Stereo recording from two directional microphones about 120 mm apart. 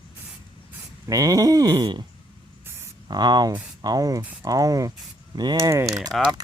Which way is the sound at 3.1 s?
35° right (ahead or behind).